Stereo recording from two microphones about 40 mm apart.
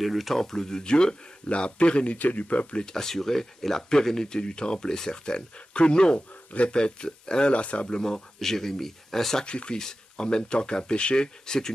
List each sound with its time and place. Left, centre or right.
0.0 s speech: centre; by 2.1 s left
2.1 s speech: left
2.8 s speech: centre
7.5 s speech: left
8.0 s speech: centre
9.5 s speech: left